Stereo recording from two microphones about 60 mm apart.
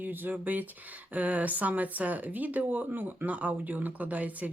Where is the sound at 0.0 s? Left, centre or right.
Right.